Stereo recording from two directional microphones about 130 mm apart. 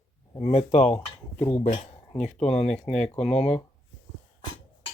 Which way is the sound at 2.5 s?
55° left (ahead or behind).